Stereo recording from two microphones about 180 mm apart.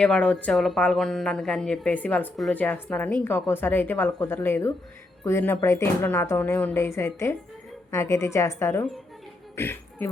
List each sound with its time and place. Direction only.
0.0 s speech: 5° left (ahead or behind)